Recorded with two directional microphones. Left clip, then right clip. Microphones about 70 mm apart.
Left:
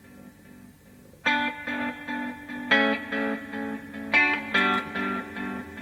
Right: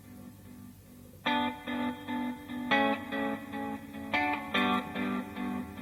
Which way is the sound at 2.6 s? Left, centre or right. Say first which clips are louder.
Left 6 dB; right.